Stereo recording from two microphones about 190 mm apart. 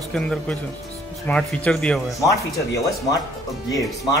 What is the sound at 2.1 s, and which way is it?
Speech, 15° left (ahead or behind).